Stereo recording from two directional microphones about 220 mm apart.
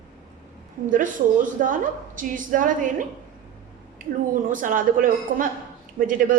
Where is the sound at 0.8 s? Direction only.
35° right (ahead or behind).